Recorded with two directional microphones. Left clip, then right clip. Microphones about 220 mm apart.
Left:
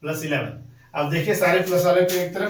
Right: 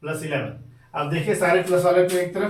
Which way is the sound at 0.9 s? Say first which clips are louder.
Left 1 dB; centre (ahead or behind).